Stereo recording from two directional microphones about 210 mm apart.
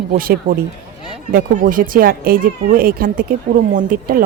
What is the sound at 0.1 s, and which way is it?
Speech, 40° right (ahead or behind).